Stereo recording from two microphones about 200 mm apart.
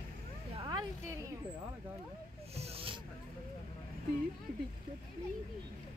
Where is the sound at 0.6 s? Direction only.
20° right (ahead or behind).